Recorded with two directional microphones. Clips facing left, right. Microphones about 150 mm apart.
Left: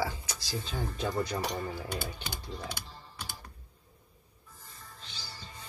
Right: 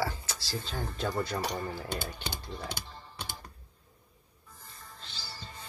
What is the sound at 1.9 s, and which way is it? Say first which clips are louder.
Speech: right 1 dB; 20° right (ahead or behind).